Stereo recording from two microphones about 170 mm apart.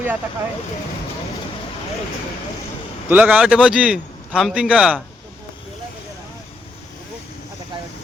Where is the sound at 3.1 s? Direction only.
10° right (ahead or behind).